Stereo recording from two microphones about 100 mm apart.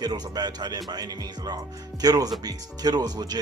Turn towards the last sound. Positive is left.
turn(degrees=-40)  # may be behind; listen again after turning